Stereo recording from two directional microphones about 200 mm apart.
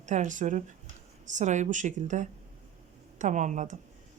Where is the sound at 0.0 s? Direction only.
40° right (ahead or behind).